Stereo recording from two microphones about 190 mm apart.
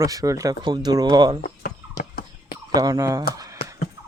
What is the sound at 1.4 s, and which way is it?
Chicken, 50° left (ahead or behind).